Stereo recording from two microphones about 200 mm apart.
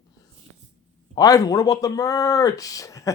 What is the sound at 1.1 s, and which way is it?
Speech, 20° left (ahead or behind).